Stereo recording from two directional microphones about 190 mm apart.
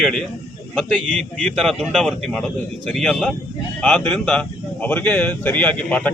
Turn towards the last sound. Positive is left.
turn(degrees=5)  # may be behind; listen again after turning